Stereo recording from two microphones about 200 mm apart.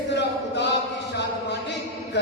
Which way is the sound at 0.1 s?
60° left (ahead or behind).